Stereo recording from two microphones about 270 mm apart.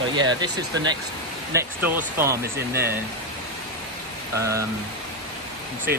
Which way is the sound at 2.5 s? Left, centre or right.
Right.